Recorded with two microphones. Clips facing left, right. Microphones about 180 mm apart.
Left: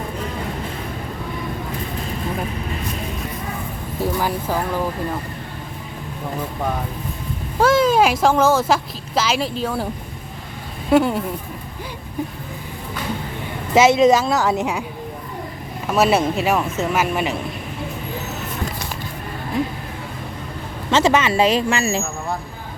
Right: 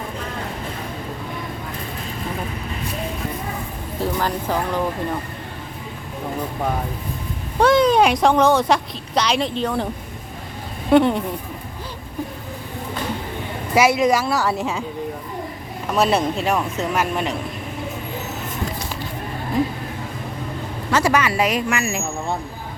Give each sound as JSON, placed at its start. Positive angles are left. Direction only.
{"t": 4.0, "sound": "speech", "side_deg": 10}
{"t": 7.6, "sound": "speech", "side_deg": 5}
{"t": 10.9, "sound": "speech", "side_deg": 5}
{"t": 13.7, "sound": "a woman's voice", "side_deg": 25}
{"t": 15.9, "sound": "speech", "side_deg": 5}
{"t": 20.9, "sound": "a woman's voice", "side_deg": 25}